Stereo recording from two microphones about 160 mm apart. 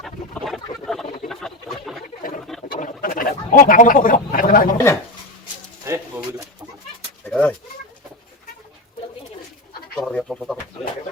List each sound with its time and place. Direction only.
0.0 s duck: centre (ahead or behind)
1.3 s a sound: centre (ahead or behind)
2.7 s chicken: 60° left (ahead or behind)
5.9 s pigeon: 20° right (ahead or behind)
7.3 s bird: 5° left (ahead or behind)
10.0 s bird: 5° left (ahead or behind)